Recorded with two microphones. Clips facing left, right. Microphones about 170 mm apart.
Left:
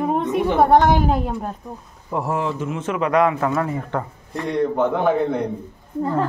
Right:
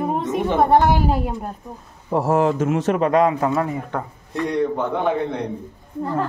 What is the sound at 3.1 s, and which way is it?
Speech, 25° right (ahead or behind).